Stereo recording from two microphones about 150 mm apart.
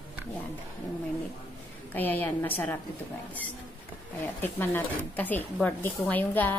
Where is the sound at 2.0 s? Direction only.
10° left (ahead or behind).